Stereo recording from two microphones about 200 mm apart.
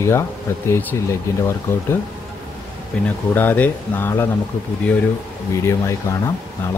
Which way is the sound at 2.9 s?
5° left (ahead or behind).